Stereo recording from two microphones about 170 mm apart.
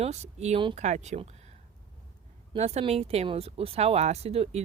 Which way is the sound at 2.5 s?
40° right (ahead or behind).